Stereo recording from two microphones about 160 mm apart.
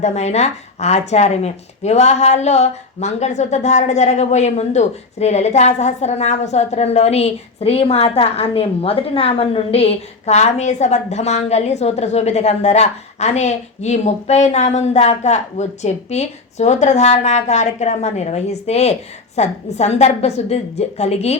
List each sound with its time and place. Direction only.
0.0 s a woman's voice: 45° left (ahead or behind)